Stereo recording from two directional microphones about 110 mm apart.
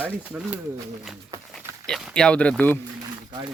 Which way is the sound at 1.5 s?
Centre (ahead or behind).